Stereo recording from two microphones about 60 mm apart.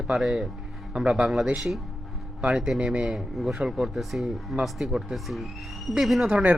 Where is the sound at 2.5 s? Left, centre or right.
Centre.